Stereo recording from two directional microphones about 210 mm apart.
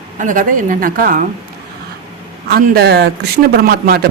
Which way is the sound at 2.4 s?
50° right (ahead or behind).